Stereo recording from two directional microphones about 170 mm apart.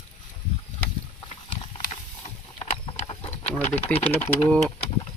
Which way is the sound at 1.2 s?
30° left (ahead or behind).